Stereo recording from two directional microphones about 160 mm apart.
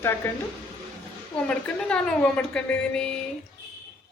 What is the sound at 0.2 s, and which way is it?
Speech, 10° left (ahead or behind).